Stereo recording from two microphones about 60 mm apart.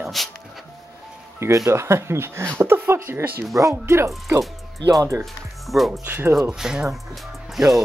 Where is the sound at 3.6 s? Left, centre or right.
Right.